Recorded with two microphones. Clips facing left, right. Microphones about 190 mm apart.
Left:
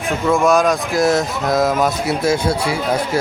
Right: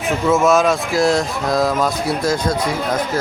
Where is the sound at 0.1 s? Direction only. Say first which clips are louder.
Even; centre (ahead or behind).